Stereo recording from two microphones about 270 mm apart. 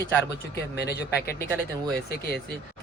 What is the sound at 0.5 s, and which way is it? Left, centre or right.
Speech, left.